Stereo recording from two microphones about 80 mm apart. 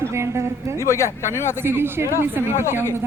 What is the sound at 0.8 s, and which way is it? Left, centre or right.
Speech, left.